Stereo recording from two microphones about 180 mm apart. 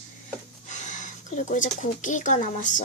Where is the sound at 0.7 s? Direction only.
45° left (ahead or behind).